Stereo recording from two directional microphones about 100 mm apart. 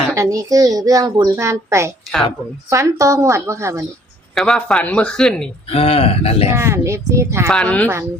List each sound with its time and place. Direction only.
0.1 s a woman's voice: 35° right (ahead or behind)
4.4 s speech: 5° left (ahead or behind)
5.7 s speech: 75° left (ahead or behind)
6.5 s speech: 25° right (ahead or behind)
7.5 s speech: 10° left (ahead or behind)